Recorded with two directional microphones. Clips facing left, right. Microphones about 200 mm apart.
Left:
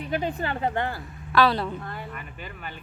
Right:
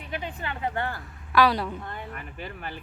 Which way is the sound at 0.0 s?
40° left (ahead or behind).